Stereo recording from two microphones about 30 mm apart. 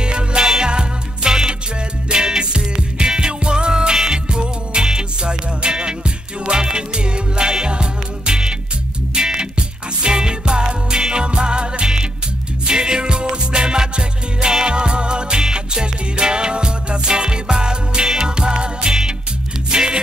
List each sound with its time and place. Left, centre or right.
0.0 s music: right